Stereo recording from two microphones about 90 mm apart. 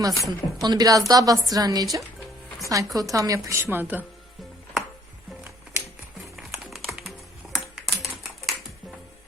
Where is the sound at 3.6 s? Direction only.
20° right (ahead or behind).